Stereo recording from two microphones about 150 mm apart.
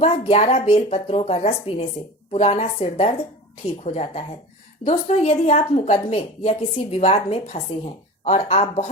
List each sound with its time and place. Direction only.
0.0 s a woman's voice: 40° left (ahead or behind)